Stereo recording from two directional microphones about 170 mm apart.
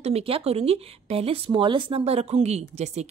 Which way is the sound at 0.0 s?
35° right (ahead or behind).